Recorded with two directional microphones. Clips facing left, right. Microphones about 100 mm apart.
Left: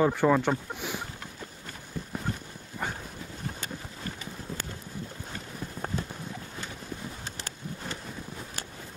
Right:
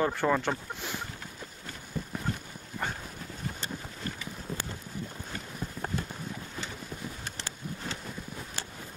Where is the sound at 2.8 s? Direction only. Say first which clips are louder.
Left 1 dB; 10° left (ahead or behind).